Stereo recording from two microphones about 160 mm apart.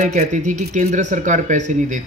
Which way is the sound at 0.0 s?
50° right (ahead or behind).